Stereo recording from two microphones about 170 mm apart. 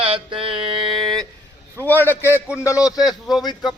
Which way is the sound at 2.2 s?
10° right (ahead or behind).